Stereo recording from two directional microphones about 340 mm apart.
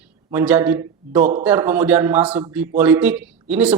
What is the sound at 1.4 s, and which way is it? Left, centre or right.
Speech, centre.